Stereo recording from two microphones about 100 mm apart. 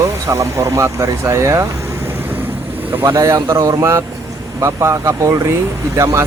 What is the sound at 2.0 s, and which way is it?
Vehicle, 20° right (ahead or behind).